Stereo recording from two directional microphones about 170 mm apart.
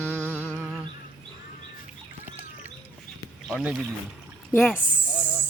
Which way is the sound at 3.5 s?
Centre (ahead or behind).